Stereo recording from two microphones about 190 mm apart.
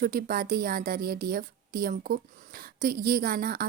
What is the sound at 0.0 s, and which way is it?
A woman's voice, 50° right (ahead or behind).